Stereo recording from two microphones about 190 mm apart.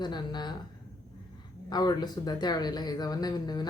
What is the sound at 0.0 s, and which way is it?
Speech, 25° left (ahead or behind).